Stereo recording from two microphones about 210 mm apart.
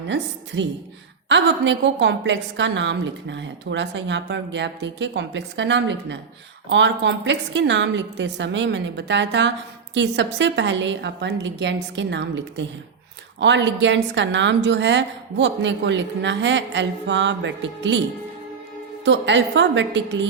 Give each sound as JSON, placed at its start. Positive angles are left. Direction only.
{"t": 0.1, "sound": "a woman's voice", "side_deg": -60}
{"t": 19.0, "sound": "a woman's voice", "side_deg": -60}